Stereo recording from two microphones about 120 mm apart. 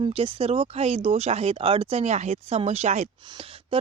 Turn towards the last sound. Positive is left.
turn(degrees=-60)  # may be behind; listen again after turning